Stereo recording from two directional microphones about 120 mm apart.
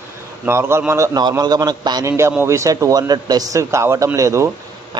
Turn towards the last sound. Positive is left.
turn(degrees=-25)  # may be behind; listen again after turning